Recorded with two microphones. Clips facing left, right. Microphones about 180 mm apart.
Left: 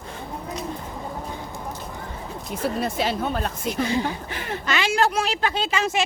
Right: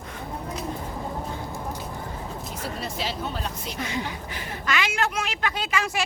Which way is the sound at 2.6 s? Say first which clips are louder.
Left 8 dB; 55° left (ahead or behind).